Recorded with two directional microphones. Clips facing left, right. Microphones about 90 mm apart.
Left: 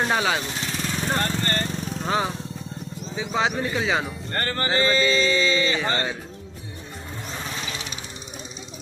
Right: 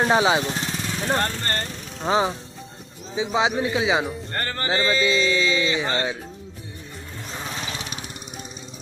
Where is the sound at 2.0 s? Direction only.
20° right (ahead or behind).